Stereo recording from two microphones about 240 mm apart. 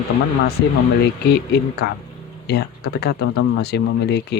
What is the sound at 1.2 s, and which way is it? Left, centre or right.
Speech, left.